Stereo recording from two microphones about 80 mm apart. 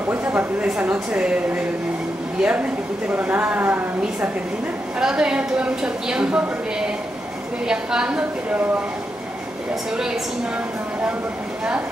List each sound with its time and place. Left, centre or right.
0.1 s a woman's voice: right
4.9 s a woman's voice: centre
7.6 s a woman's voice: centre